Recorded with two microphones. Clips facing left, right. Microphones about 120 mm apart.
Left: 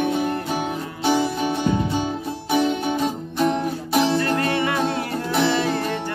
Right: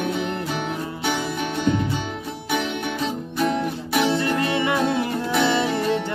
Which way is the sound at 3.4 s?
20° left (ahead or behind).